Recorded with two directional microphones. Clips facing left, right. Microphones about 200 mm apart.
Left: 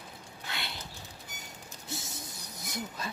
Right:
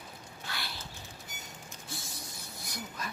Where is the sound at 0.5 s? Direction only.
20° left (ahead or behind).